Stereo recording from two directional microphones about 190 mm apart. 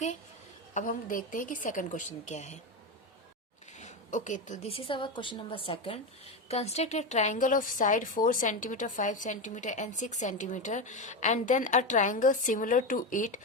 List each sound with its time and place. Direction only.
0.7 s a woman's voice: 45° left (ahead or behind)
3.8 s a woman's voice: 40° left (ahead or behind)